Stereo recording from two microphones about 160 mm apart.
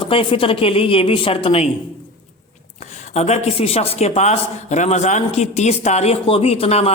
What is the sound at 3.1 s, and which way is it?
Speech, 45° left (ahead or behind).